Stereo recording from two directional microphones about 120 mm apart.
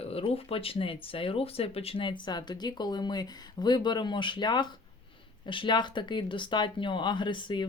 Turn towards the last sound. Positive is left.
turn(degrees=40)  # may be behind; listen again after turning